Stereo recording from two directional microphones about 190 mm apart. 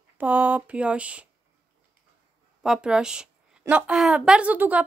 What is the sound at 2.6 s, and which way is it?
Speech, 5° right (ahead or behind).